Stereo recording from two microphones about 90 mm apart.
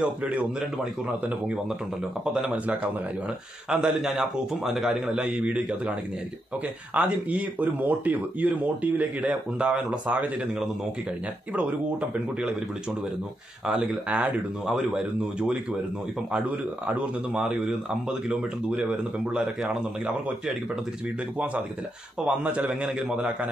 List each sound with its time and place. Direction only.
0.0 s speech: 15° right (ahead or behind)
2.3 s speech: 10° right (ahead or behind)
3.7 s speech: 5° right (ahead or behind)
11.5 s speech: 15° right (ahead or behind)
13.7 s speech: 10° right (ahead or behind)
22.2 s speech: 15° right (ahead or behind)